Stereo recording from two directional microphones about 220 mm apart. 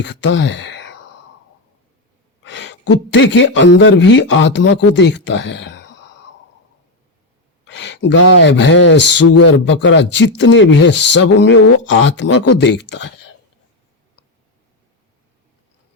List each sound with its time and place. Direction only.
0.0 s speech: 55° left (ahead or behind)
2.4 s a man's voice: 55° left (ahead or behind)
7.7 s a sound: 55° left (ahead or behind)
8.4 s a man's voice: 55° left (ahead or behind)